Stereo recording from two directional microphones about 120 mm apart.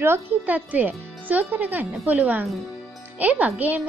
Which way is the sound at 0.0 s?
15° right (ahead or behind).